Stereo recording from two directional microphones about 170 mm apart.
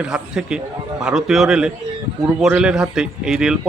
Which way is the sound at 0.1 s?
5° right (ahead or behind).